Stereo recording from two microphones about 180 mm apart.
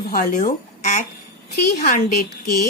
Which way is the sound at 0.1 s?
50° left (ahead or behind).